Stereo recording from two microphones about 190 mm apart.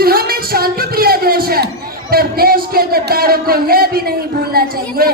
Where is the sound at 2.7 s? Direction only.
55° right (ahead or behind).